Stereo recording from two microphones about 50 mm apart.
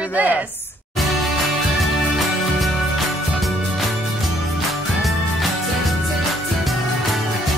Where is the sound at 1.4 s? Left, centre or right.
Centre.